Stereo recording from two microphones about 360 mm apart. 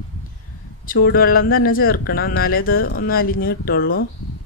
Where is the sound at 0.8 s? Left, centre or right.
Left.